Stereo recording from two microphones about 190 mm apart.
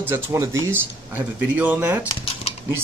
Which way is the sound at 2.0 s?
30° left (ahead or behind).